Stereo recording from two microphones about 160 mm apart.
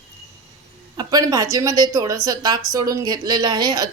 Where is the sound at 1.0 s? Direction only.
25° right (ahead or behind).